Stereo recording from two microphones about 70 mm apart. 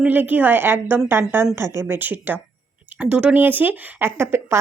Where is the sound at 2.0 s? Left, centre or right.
Right.